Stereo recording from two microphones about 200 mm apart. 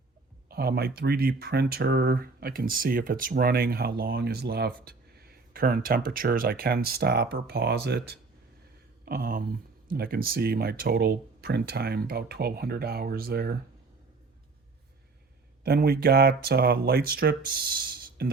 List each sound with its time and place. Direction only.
0.5 s speech: 50° right (ahead or behind)
15.6 s speech: 50° right (ahead or behind)